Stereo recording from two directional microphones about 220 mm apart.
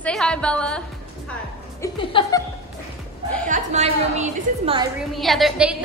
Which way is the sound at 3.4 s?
35° right (ahead or behind).